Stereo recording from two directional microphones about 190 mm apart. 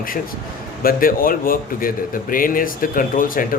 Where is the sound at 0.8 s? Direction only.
50° left (ahead or behind).